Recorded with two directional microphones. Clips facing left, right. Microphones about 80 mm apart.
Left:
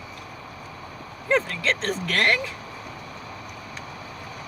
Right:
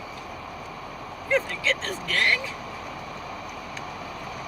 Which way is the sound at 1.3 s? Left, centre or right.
Left.